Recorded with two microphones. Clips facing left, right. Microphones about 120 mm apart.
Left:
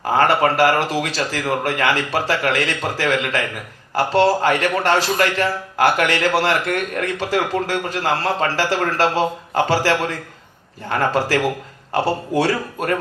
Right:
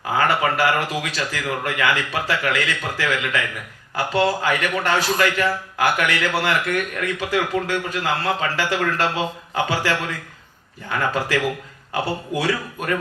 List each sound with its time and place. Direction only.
0.0 s speech: 35° left (ahead or behind)